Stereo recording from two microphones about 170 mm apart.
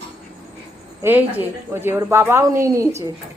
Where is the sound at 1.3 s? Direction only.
15° right (ahead or behind).